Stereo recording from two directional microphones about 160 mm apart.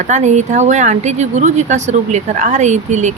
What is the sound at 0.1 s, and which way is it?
Speech, 45° right (ahead or behind).